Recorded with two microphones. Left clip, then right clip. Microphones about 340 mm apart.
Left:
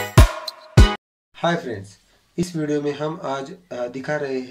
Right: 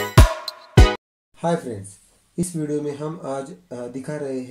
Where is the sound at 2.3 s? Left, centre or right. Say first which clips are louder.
Left 2 dB; left.